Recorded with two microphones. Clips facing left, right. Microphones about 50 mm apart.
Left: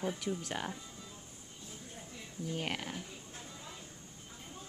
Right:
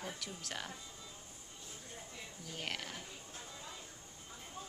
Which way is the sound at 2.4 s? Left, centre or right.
Centre.